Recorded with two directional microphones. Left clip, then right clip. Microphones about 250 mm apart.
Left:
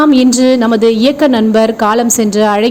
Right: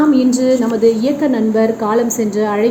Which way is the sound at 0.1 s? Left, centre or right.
Left.